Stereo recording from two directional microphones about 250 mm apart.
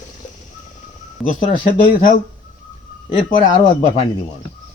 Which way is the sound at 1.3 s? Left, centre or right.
Left.